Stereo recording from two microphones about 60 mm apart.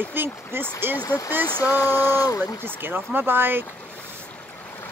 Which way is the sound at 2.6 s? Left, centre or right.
Right.